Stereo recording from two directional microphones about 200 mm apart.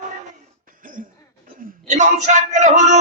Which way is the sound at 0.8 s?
45° right (ahead or behind).